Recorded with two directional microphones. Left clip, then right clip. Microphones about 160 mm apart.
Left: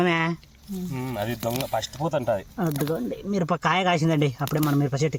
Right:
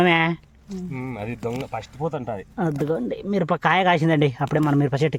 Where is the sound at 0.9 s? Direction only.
45° left (ahead or behind).